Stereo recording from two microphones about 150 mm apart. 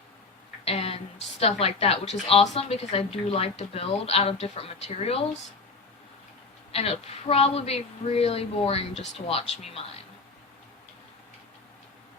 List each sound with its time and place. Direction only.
0.6 s a sound: 40° left (ahead or behind)
2.5 s speech: 40° left (ahead or behind)
6.7 s speech: 40° left (ahead or behind)